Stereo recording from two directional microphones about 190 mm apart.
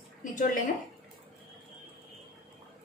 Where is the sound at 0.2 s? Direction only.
40° left (ahead or behind).